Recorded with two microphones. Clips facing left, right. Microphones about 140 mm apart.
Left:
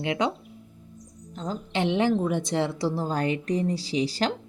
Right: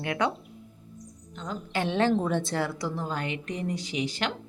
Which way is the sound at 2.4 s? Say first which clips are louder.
Left 4 dB; 20° left (ahead or behind).